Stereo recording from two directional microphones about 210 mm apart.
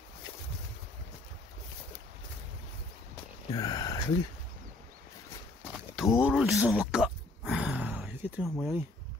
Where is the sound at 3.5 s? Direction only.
20° left (ahead or behind).